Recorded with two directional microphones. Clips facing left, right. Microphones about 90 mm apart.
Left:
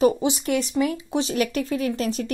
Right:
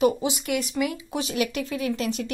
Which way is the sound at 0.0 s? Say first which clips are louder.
Left 3 dB; 30° left (ahead or behind).